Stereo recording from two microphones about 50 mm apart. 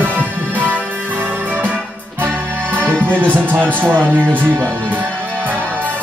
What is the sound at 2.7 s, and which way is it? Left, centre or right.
Music, left.